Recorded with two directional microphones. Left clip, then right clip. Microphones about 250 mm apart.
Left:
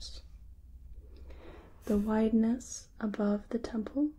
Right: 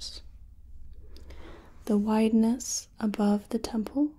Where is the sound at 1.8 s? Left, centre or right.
Centre.